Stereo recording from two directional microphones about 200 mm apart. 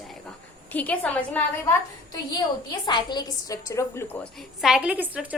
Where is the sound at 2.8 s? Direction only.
20° left (ahead or behind).